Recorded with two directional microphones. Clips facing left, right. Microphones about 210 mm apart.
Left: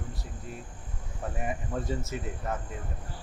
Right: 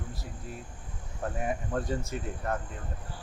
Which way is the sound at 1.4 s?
Centre (ahead or behind).